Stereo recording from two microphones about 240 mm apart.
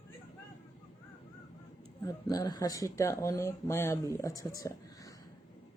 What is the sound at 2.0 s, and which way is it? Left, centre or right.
Speech, centre.